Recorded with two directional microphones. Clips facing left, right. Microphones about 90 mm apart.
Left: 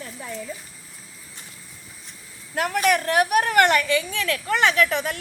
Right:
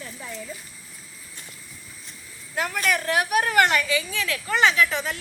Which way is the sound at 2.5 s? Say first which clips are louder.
Left 4 dB; 55° left (ahead or behind).